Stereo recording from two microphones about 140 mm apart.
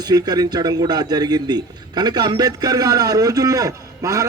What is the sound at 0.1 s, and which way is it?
A man's voice, 30° right (ahead or behind).